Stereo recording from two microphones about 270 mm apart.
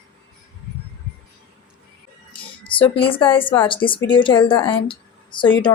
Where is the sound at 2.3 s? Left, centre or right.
Centre.